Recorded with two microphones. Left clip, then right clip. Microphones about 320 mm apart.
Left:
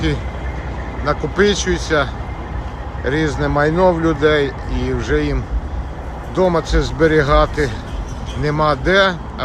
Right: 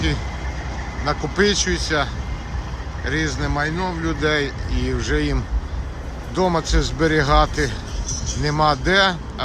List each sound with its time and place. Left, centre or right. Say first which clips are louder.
1.0 s speech: left 4 dB; centre